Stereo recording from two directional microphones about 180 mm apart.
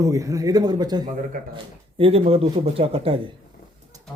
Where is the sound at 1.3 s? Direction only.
50° right (ahead or behind).